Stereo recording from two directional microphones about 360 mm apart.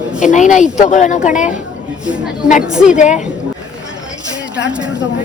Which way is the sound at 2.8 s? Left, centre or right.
Centre.